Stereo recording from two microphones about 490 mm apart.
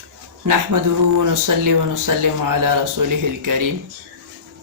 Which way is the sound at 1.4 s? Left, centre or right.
Right.